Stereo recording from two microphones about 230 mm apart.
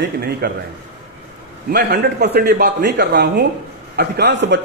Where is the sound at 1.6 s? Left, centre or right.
Right.